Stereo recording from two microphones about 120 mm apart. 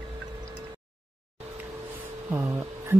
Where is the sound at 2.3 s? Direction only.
15° right (ahead or behind).